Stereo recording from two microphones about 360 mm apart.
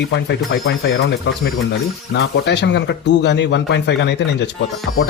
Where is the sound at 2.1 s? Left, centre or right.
Left.